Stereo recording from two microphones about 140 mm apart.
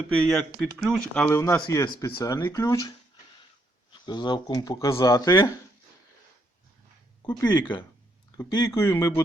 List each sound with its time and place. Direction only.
0.3 s speech: centre (ahead or behind)
1.3 s speech: 15° left (ahead or behind)
1.6 s speech: 30° left (ahead or behind)
4.0 s speech: 30° left (ahead or behind)
7.4 s speech: 30° left (ahead or behind)